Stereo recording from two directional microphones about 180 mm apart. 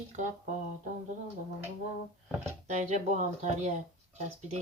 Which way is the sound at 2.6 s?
40° right (ahead or behind).